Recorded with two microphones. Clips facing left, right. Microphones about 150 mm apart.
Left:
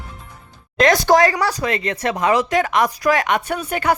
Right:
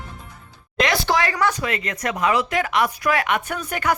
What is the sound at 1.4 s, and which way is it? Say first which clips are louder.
Speech: left 2 dB; 35° left (ahead or behind).